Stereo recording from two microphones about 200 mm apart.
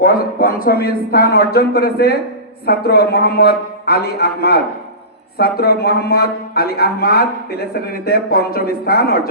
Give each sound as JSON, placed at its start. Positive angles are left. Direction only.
{"t": 0.0, "sound": "speech", "side_deg": 45}